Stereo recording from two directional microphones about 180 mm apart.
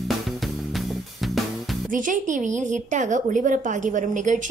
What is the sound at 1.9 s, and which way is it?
A woman's voice, 45° right (ahead or behind).